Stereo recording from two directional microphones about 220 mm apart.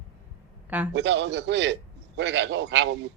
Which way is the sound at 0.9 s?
50° right (ahead or behind).